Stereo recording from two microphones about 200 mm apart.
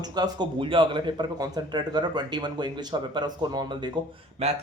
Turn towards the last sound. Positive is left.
turn(degrees=-30)  # may be behind; listen again after turning